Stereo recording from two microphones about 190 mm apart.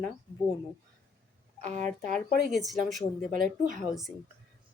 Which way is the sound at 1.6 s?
40° right (ahead or behind).